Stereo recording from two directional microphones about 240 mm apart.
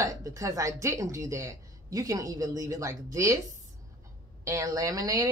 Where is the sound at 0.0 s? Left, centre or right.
Centre.